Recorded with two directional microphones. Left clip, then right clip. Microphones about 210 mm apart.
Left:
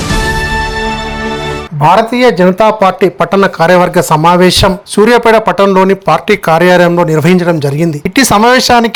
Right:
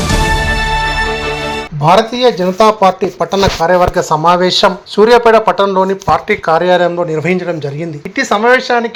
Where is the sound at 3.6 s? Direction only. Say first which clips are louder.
Left 3 dB; 45° left (ahead or behind).